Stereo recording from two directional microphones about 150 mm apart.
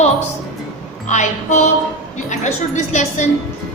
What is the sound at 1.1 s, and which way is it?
Speech, 55° left (ahead or behind).